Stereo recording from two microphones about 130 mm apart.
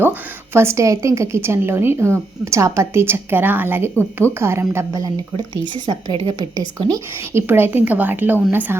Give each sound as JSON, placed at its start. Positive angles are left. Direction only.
{"t": 0.0, "sound": "a woman's voice", "side_deg": -15}
{"t": 5.7, "sound": "a woman's voice", "side_deg": -35}
{"t": 7.3, "sound": "a woman's voice", "side_deg": -15}